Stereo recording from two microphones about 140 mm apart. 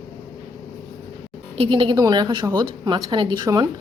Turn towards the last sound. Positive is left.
turn(degrees=-30)  # may be behind; listen again after turning